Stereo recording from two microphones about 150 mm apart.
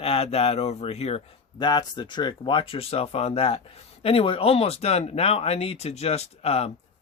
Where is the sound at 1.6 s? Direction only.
30° left (ahead or behind).